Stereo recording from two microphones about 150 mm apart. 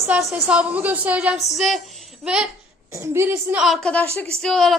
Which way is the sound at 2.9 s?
15° right (ahead or behind).